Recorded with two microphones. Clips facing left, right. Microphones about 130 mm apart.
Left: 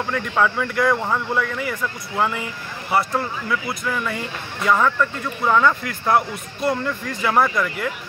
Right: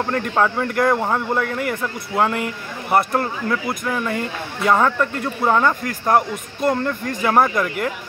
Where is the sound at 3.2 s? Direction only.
50° right (ahead or behind).